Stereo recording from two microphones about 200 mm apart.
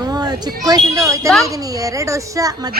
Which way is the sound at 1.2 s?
Centre (ahead or behind).